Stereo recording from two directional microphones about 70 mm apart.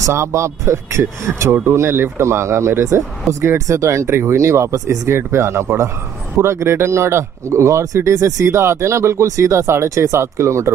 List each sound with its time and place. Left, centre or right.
0.0 s speech: right